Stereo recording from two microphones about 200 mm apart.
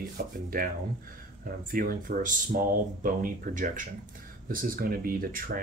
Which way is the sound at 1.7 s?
45° right (ahead or behind).